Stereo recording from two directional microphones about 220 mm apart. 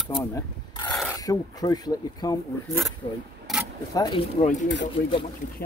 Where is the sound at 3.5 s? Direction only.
Centre (ahead or behind).